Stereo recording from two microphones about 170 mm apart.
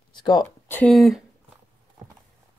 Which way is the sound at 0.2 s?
25° left (ahead or behind).